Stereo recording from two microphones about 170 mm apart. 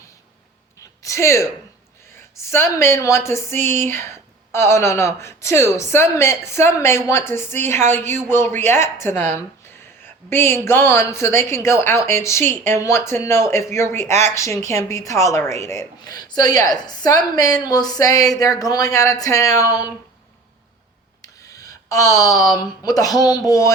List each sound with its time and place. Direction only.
1.0 s a woman's voice: 15° left (ahead or behind)
21.2 s a sound: 20° left (ahead or behind)
22.6 s speech: 20° left (ahead or behind)